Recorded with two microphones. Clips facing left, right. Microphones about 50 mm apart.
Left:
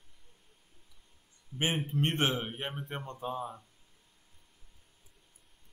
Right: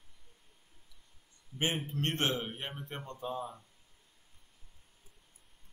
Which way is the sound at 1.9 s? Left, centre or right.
Centre.